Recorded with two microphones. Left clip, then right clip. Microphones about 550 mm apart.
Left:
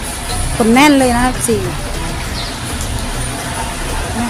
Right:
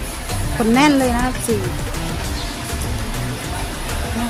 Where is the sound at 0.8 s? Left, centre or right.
Right.